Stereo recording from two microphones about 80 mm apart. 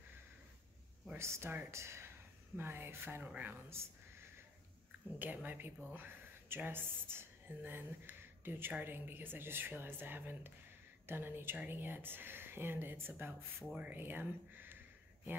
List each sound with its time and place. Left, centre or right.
1.1 s speech: right
3.7 s a sound: right
5.2 s a woman's voice: right